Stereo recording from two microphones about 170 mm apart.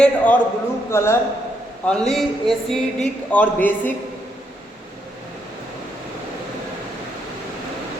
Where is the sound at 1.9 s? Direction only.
5° left (ahead or behind).